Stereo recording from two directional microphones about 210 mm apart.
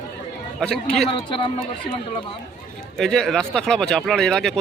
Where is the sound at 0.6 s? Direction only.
5° left (ahead or behind).